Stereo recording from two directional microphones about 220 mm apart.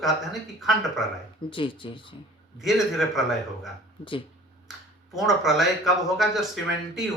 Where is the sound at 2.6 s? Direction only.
Centre (ahead or behind).